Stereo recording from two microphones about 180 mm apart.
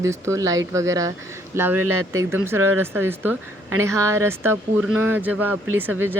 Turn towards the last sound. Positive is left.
turn(degrees=-10)  # may be behind; listen again after turning